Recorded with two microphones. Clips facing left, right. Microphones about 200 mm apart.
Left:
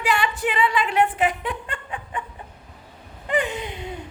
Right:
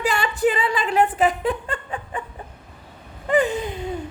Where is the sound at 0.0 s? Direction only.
40° right (ahead or behind).